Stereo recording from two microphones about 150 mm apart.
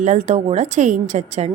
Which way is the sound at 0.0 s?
50° right (ahead or behind).